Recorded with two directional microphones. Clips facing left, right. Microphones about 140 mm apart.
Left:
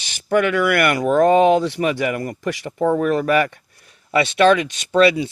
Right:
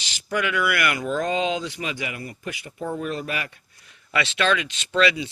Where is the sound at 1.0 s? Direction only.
60° left (ahead or behind).